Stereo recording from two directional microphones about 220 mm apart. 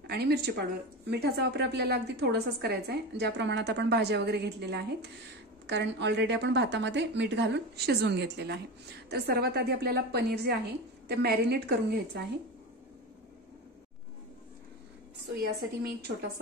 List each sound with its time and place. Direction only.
0.0 s a woman's voice: 45° right (ahead or behind)
15.3 s a woman's voice: 45° right (ahead or behind)